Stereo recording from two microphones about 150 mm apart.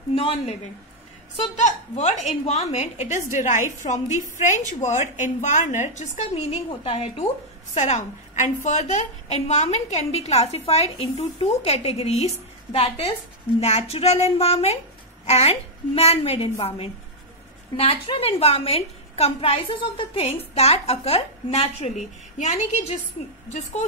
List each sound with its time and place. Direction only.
0.1 s a woman's voice: 40° left (ahead or behind)
1.6 s a woman's voice: 50° left (ahead or behind)
7.7 s a woman's voice: 50° left (ahead or behind)